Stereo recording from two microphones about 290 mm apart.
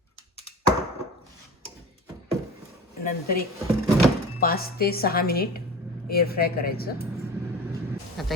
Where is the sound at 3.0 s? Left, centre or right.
Left.